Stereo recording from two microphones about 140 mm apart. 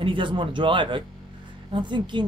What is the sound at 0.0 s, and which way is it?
Speech, 35° right (ahead or behind).